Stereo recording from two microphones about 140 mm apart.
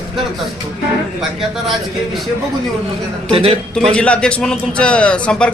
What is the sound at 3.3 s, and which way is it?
Speech, 45° right (ahead or behind).